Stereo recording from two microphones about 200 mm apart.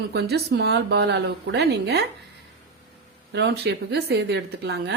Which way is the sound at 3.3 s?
60° right (ahead or behind).